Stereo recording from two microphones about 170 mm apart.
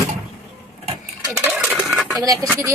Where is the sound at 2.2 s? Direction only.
20° right (ahead or behind).